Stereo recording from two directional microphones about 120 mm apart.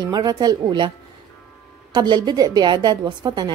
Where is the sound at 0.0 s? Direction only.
35° right (ahead or behind).